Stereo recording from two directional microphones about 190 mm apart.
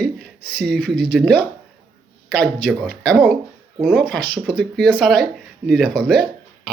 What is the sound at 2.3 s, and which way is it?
Speech, 5° left (ahead or behind).